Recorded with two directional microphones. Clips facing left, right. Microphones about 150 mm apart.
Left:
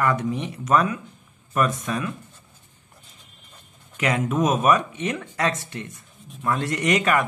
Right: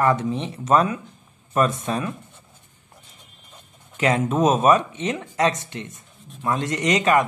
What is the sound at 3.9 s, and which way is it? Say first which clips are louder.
Speech: right 2 dB; 30° right (ahead or behind).